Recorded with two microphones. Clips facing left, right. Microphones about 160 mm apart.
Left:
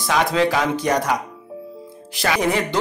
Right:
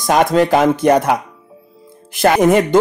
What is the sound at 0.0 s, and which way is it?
Speech, 50° right (ahead or behind).